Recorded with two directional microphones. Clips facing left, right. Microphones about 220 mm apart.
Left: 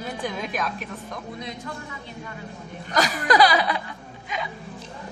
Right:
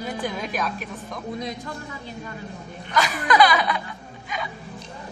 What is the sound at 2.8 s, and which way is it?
Speech, 40° left (ahead or behind).